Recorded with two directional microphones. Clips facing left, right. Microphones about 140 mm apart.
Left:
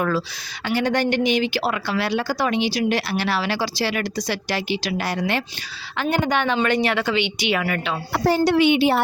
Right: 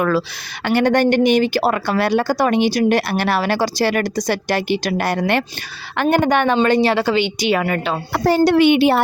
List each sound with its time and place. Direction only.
0.6 s speech: 60° right (ahead or behind)
6.6 s speech: 30° right (ahead or behind)
8.1 s a woman's voice: 60° right (ahead or behind)